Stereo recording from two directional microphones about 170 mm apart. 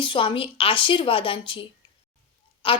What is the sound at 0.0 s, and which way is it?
A woman's voice, 30° left (ahead or behind).